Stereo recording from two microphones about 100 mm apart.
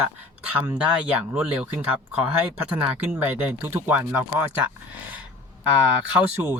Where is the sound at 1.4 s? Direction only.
15° right (ahead or behind).